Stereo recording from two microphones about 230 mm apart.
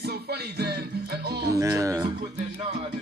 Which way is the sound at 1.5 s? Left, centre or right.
Centre.